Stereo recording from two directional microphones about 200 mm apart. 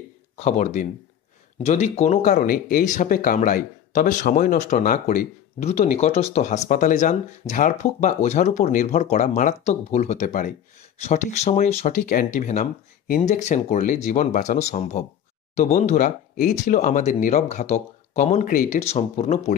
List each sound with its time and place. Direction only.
0.4 s speech: 35° left (ahead or behind)